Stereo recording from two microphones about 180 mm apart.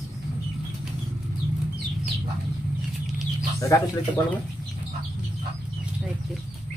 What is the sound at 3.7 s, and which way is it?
Speech, 20° left (ahead or behind).